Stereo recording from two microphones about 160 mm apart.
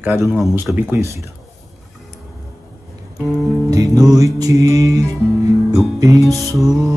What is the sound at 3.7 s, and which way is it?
Music, 20° right (ahead or behind).